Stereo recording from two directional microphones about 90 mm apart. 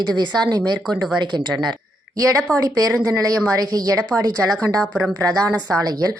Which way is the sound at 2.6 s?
45° right (ahead or behind).